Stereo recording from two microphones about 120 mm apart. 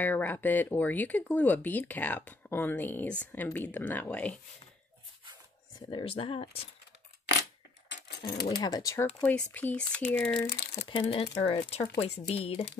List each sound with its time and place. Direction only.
0.0 s speech: 15° left (ahead or behind)
5.8 s speech: 40° left (ahead or behind)
8.2 s speech: 35° left (ahead or behind)
9.2 s speech: 15° left (ahead or behind)
10.9 s speech: 50° left (ahead or behind)